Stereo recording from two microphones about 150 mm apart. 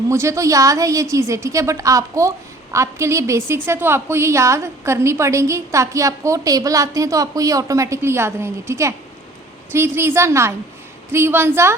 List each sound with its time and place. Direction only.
0.1 s a woman's voice: 20° right (ahead or behind)